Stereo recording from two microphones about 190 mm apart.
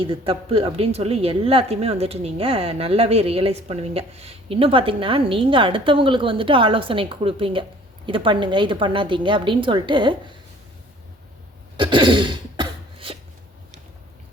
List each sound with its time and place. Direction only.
0.1 s speech: 30° right (ahead or behind)
11.8 s cough: 25° right (ahead or behind)